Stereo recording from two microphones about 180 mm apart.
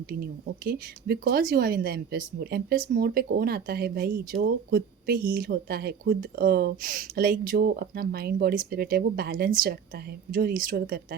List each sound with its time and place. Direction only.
0.1 s speech: 55° right (ahead or behind)